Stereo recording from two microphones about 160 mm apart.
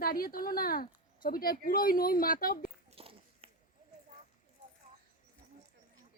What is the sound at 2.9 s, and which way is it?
Run, 35° right (ahead or behind).